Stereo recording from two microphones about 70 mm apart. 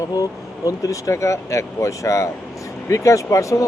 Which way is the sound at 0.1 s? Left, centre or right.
Left.